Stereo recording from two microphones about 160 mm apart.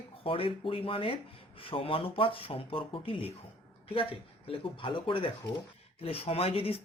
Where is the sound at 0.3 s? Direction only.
35° left (ahead or behind).